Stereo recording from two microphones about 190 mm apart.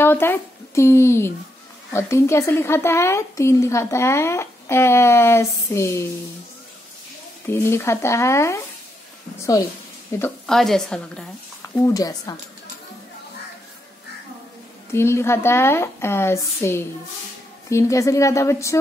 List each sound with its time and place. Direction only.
0.0 s a woman's voice: 10° left (ahead or behind)
7.4 s a woman's voice: 10° left (ahead or behind)
10.4 s a woman's voice: centre (ahead or behind)
11.8 s speech: 20° left (ahead or behind)
14.9 s a woman's voice: 15° left (ahead or behind)